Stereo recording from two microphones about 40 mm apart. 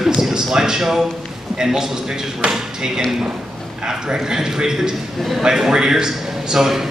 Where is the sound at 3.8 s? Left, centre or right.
Right.